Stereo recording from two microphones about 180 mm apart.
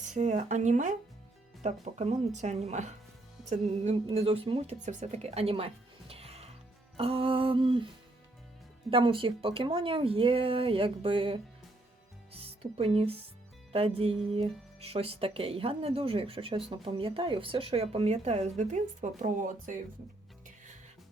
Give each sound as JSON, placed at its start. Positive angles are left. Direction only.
{"t": 0.1, "sound": "speech", "side_deg": -40}
{"t": 8.9, "sound": "speech", "side_deg": -30}
{"t": 12.3, "sound": "music", "side_deg": -35}
{"t": 13.7, "sound": "speech", "side_deg": -35}